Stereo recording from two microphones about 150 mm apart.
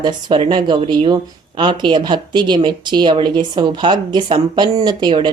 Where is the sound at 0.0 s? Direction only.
30° right (ahead or behind).